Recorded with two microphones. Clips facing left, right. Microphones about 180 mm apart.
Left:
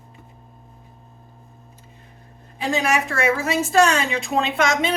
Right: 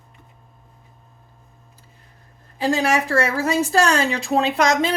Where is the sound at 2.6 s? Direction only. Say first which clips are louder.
Right 2 dB; 35° right (ahead or behind).